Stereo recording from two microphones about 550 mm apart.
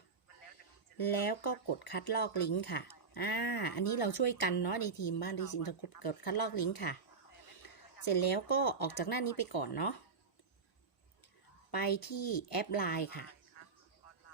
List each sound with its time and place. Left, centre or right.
0.9 s speech: left
11.7 s speech: left
13.6 s a sound: left